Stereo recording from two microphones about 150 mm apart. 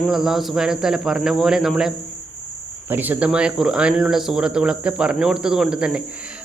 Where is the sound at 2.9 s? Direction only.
10° right (ahead or behind).